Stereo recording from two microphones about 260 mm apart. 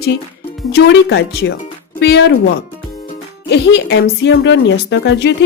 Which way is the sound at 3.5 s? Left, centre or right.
Left.